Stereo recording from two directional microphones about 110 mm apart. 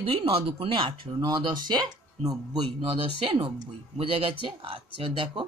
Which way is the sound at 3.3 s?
55° right (ahead or behind).